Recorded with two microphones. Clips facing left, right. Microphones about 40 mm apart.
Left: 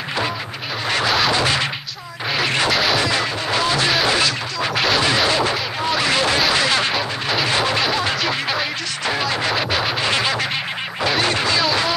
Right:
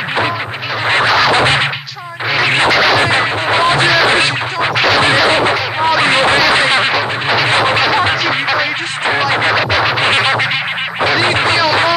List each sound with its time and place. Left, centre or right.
1.3 s scratching: right
2.4 s a sound: right
2.7 s music: centre
3.0 s music: right
4.0 s quack: right
5.0 s a sound: right
7.9 s quack: right
9.6 s music: centre
9.9 s music: right